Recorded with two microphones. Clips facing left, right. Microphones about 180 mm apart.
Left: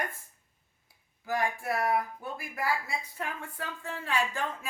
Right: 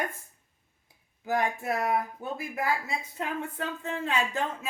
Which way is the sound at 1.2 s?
20° right (ahead or behind).